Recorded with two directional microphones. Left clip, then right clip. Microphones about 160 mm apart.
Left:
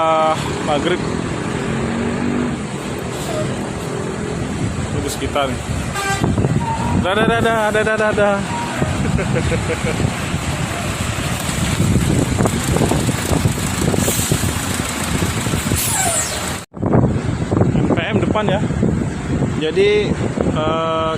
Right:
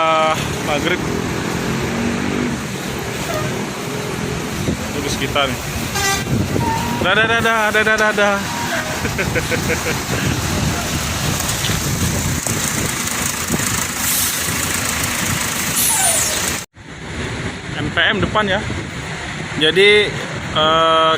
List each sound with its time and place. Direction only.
0.0 s vehicle: 15° left (ahead or behind)
7.0 s speech: 10° left (ahead or behind)
17.9 s vehicle: 10° left (ahead or behind)
18.3 s speech: 25° left (ahead or behind)
19.6 s speech: 5° left (ahead or behind)